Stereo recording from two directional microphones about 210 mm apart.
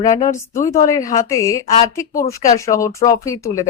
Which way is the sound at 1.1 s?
15° left (ahead or behind).